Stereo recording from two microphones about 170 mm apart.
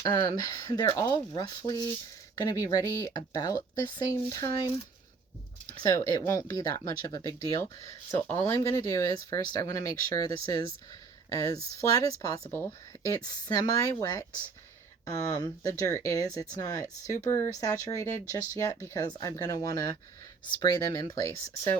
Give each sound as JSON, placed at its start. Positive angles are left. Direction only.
{"t": 0.0, "sound": "speech", "side_deg": 20}
{"t": 5.8, "sound": "speech", "side_deg": 20}